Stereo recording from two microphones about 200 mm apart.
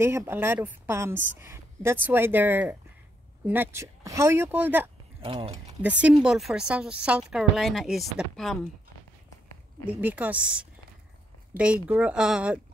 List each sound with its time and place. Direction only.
0.0 s a woman's voice: 15° right (ahead or behind)
5.2 s speech: 30° right (ahead or behind)
5.8 s speech: 5° right (ahead or behind)
9.8 s a woman's voice: 10° right (ahead or behind)